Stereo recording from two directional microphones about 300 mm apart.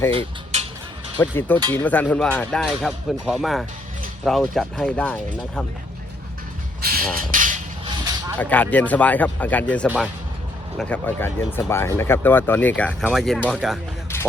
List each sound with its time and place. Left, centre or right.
0.1 s speech: centre
1.2 s speech: centre
7.2 s a sound: right
8.4 s speech: centre